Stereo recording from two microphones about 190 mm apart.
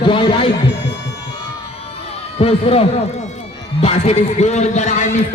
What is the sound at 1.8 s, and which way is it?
Music, 30° left (ahead or behind).